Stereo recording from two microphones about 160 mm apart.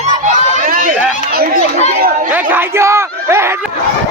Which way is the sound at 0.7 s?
55° right (ahead or behind).